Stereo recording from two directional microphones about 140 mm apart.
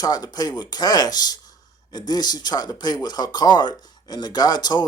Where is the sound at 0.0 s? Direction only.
30° left (ahead or behind).